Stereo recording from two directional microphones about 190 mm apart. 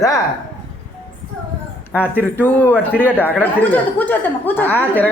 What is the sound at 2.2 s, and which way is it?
Speech, 10° left (ahead or behind).